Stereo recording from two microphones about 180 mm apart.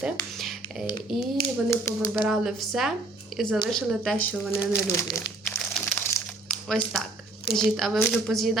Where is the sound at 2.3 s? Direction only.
Centre (ahead or behind).